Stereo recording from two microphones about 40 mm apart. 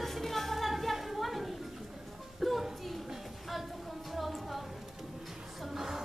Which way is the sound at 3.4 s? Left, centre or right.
Centre.